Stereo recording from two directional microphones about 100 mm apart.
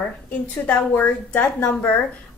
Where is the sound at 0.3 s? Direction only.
20° left (ahead or behind).